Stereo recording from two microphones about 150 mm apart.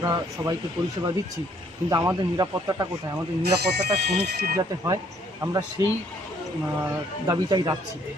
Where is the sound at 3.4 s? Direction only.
90° right.